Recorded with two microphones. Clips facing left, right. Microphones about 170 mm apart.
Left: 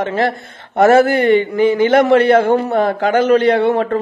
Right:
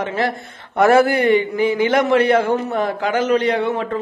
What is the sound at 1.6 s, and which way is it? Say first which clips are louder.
Speech: left 5 dB; 30° left (ahead or behind).